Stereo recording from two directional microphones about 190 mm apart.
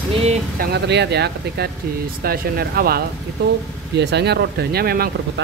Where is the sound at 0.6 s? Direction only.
60° right (ahead or behind).